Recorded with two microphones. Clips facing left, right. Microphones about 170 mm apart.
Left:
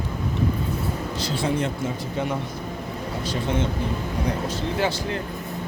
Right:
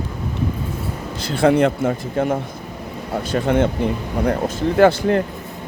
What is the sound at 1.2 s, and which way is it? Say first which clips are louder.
Speech: right 10 dB; 60° right (ahead or behind).